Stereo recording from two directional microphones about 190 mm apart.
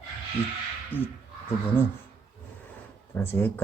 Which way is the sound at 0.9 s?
10° left (ahead or behind).